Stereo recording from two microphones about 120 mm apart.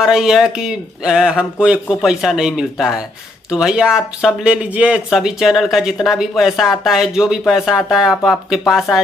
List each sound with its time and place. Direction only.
0.0 s speech: 5° right (ahead or behind)